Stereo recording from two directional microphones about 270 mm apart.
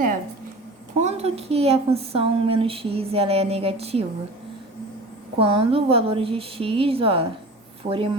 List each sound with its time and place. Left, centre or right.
0.9 s a woman's voice: right
5.4 s a woman's voice: centre